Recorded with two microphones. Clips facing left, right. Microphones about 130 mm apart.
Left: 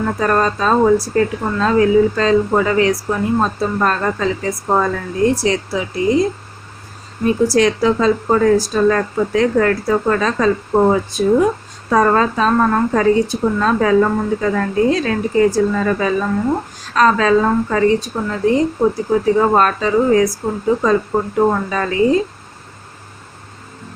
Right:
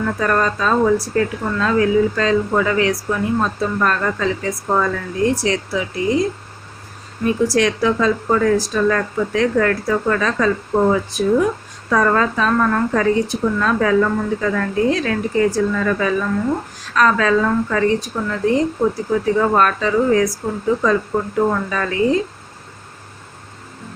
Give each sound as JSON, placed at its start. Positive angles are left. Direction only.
{"t": 0.0, "sound": "a woman's voice", "side_deg": 30}
{"t": 7.3, "sound": "a woman's voice", "side_deg": 30}